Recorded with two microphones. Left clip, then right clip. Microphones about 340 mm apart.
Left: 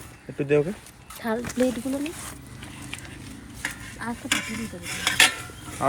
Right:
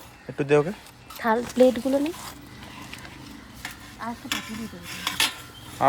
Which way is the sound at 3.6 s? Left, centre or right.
Centre.